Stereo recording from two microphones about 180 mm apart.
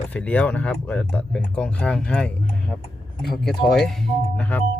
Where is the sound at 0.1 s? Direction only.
10° left (ahead or behind).